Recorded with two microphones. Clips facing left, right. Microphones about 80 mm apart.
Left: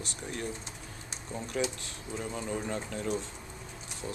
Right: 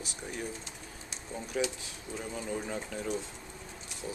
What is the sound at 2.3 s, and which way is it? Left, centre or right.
Speech, centre.